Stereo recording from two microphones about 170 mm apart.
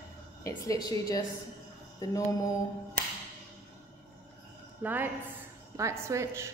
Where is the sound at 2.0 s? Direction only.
20° left (ahead or behind).